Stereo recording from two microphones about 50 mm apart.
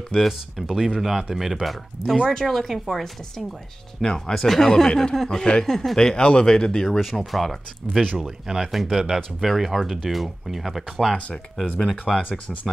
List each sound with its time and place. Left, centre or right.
0.1 s speech: centre
7.0 s speech: centre
8.2 s speech: centre